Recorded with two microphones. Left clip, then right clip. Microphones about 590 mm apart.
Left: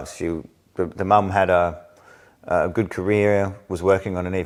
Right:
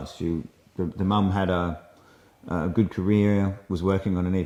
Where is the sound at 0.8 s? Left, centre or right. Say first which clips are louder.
Left 9 dB; left.